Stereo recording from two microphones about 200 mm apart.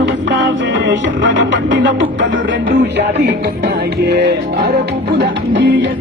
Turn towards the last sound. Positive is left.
turn(degrees=-65)  # may be behind; listen again after turning